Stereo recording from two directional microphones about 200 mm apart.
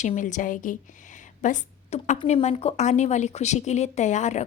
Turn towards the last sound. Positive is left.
turn(degrees=35)  # may be behind; listen again after turning